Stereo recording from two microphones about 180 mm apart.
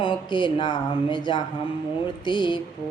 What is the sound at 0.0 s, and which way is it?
Speech, 25° left (ahead or behind).